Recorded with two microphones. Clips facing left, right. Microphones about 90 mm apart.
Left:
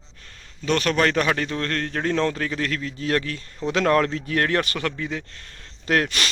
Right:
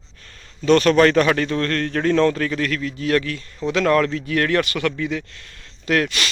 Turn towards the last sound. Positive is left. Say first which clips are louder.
# right 2 dB
turn(degrees=35)  # may be behind; listen again after turning